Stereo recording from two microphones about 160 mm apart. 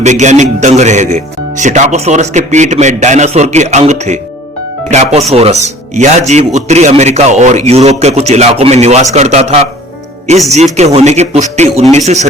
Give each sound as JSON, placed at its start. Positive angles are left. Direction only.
{"t": 0.0, "sound": "speech", "side_deg": -45}